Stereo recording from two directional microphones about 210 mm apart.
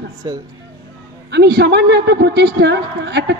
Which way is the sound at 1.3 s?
50° right (ahead or behind).